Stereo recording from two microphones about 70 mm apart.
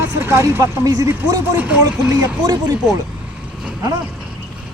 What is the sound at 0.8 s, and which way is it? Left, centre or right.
Speech, right.